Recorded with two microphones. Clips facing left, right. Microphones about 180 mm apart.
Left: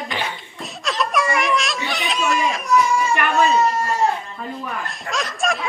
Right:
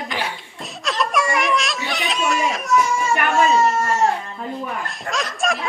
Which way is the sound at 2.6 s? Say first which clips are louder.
Left 2 dB; 45° right (ahead or behind).